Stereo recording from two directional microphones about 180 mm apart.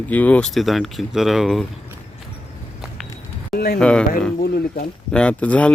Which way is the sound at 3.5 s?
60° left (ahead or behind).